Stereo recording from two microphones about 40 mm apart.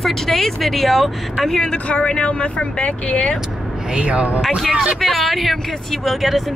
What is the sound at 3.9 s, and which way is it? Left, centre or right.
Speech, right.